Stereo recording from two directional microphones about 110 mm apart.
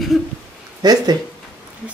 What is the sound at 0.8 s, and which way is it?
Speech, 35° right (ahead or behind).